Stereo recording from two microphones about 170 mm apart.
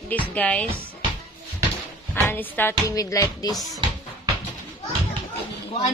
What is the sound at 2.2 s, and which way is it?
A woman's voice, 10° left (ahead or behind).